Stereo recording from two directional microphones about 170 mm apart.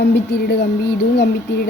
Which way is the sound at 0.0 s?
70° left (ahead or behind).